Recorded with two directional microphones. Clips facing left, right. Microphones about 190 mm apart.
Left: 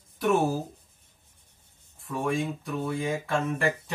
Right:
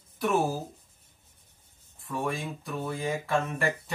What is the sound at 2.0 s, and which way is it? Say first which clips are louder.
Speech: left 4 dB; centre (ahead or behind).